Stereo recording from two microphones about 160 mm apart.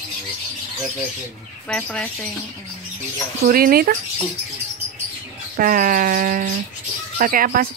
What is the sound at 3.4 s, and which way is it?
Speech, 65° right (ahead or behind).